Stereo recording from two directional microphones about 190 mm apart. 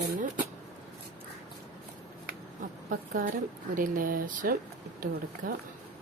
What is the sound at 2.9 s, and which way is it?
Speech, 45° right (ahead or behind).